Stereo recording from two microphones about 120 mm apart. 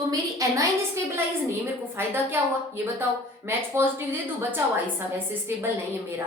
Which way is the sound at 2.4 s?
20° right (ahead or behind).